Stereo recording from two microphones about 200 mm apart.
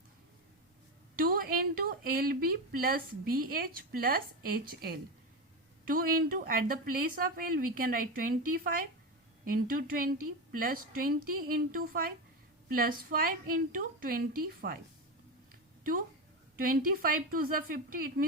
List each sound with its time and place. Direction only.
1.1 s a woman's voice: 45° right (ahead or behind)
15.8 s a woman's voice: 45° right (ahead or behind)